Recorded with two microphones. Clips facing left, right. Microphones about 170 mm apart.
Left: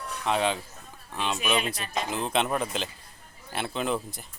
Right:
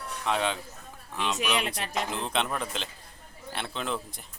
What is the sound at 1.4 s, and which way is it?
Speech, 80° right.